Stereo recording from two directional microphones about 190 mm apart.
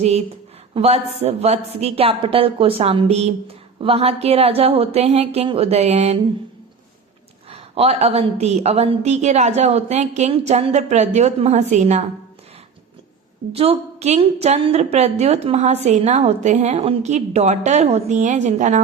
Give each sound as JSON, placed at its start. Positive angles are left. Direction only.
{"t": 0.7, "sound": "a woman's voice", "side_deg": -30}
{"t": 7.5, "sound": "a woman's voice", "side_deg": -35}
{"t": 13.5, "sound": "a woman's voice", "side_deg": -30}